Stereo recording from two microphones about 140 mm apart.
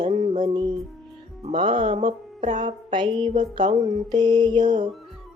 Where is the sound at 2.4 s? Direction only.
60° right (ahead or behind).